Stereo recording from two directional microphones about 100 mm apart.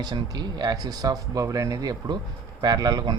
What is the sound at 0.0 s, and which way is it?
Speech, 45° right (ahead or behind).